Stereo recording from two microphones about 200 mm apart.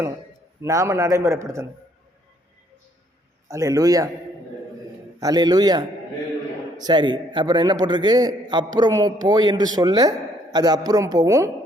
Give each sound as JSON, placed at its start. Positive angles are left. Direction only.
{"t": 0.6, "sound": "a man's voice", "side_deg": -15}
{"t": 3.5, "sound": "a man's voice", "side_deg": -15}
{"t": 5.2, "sound": "a man's voice", "side_deg": -20}